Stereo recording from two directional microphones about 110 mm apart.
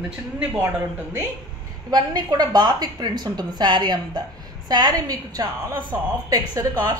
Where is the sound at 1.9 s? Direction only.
35° right (ahead or behind).